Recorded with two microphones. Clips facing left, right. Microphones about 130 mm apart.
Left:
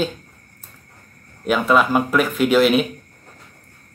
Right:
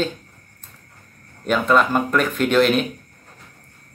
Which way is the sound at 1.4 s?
5° left (ahead or behind).